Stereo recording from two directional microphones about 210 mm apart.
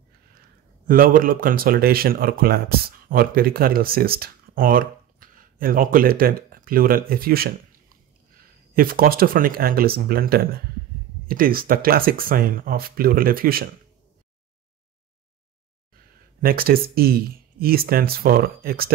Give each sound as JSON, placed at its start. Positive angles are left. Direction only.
{"t": 0.8, "sound": "speech", "side_deg": -40}
{"t": 16.3, "sound": "speech", "side_deg": -45}